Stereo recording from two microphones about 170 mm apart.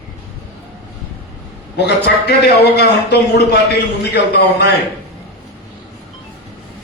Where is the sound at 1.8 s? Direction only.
75° left (ahead or behind).